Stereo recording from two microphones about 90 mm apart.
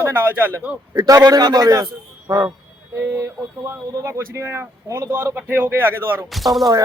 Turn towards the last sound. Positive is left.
turn(degrees=0)  # may be behind; listen again after turning